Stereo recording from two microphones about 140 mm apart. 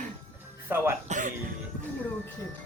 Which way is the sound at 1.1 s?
65° right (ahead or behind).